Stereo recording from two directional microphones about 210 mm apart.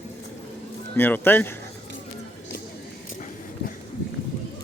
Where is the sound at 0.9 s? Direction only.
10° left (ahead or behind).